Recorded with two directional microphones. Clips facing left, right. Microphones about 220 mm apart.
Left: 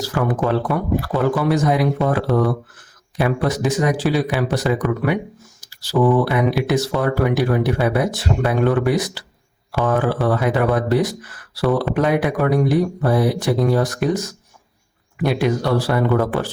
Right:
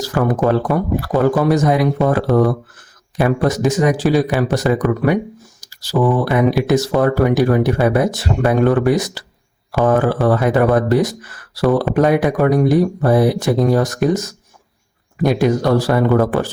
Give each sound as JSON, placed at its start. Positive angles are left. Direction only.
{"t": 0.1, "sound": "speech", "side_deg": -45}